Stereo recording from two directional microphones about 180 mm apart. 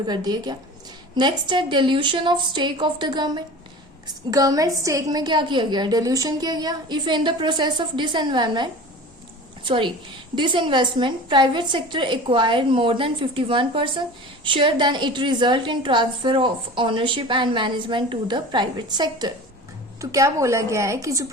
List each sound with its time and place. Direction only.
0.1 s a woman's voice: 25° right (ahead or behind)